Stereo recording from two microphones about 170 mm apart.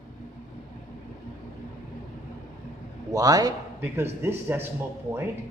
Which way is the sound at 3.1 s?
20° right (ahead or behind).